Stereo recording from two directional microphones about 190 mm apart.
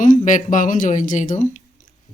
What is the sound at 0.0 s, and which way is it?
Speech, 40° left (ahead or behind).